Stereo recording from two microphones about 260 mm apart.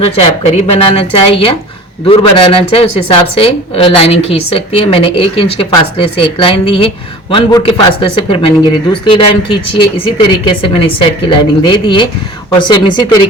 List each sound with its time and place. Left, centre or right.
0.0 s speech: left